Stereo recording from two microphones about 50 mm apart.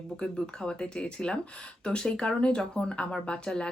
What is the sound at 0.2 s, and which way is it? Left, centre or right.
Speech, centre.